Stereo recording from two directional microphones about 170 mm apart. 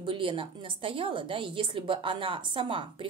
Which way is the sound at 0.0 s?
30° right (ahead or behind).